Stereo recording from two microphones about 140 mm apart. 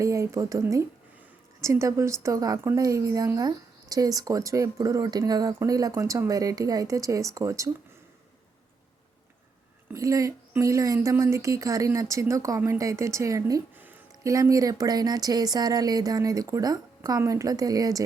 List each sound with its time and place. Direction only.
0.0 s a woman's voice: 20° right (ahead or behind)
9.9 s a woman's voice: 25° right (ahead or behind)
13.7 s a sound: 15° right (ahead or behind)
14.3 s a woman's voice: 25° right (ahead or behind)